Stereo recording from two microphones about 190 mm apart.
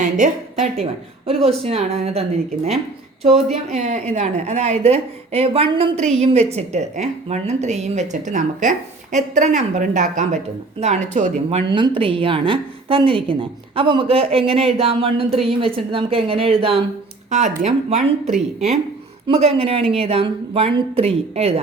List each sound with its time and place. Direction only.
0.0 s a woman's voice: 40° right (ahead or behind)
3.2 s a woman's voice: 35° right (ahead or behind)